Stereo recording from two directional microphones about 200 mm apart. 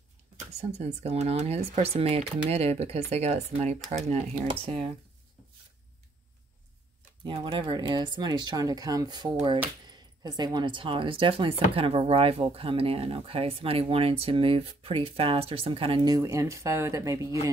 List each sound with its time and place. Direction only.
0.5 s speech: 30° right (ahead or behind)
3.6 s speech: centre (ahead or behind)
4.1 s speech: 25° right (ahead or behind)
7.2 s speech: 25° right (ahead or behind)